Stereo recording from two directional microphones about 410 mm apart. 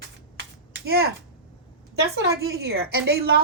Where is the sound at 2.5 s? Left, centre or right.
Right.